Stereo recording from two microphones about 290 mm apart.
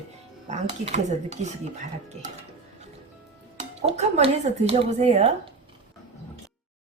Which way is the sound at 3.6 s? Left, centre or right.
Right.